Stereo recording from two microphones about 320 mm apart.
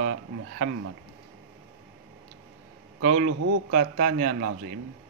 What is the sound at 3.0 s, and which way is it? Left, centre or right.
Speech, right.